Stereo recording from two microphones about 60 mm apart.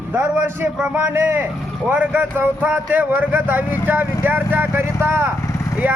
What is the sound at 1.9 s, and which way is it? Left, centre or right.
A man's voice, right.